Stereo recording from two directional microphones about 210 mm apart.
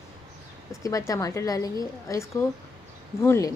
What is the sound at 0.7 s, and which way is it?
A woman's voice, 15° left (ahead or behind).